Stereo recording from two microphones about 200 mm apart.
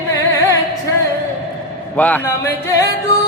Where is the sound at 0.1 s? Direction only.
15° left (ahead or behind).